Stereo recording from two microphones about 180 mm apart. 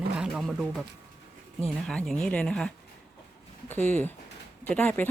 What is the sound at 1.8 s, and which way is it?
Speech, 5° left (ahead or behind).